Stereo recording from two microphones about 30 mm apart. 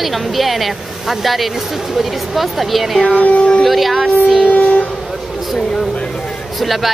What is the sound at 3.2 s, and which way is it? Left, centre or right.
Speech, left.